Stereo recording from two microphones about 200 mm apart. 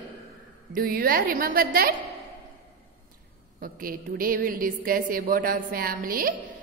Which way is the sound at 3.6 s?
45° right (ahead or behind).